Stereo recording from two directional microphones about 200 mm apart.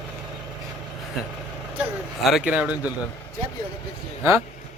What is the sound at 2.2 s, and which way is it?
Speech, centre (ahead or behind).